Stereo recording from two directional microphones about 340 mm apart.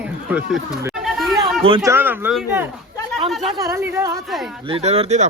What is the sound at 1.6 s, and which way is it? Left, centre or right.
Speech, centre.